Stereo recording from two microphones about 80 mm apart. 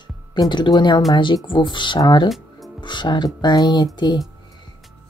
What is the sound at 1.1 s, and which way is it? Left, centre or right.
Speech, left.